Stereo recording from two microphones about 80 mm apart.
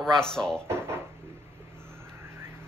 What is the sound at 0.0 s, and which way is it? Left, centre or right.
Speech, centre.